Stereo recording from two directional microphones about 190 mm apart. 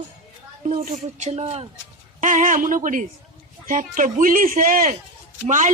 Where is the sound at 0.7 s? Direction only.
35° right (ahead or behind).